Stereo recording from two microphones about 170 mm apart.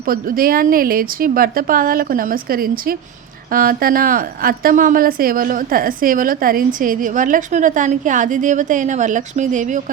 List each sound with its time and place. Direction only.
0.0 s a woman's voice: 60° right (ahead or behind)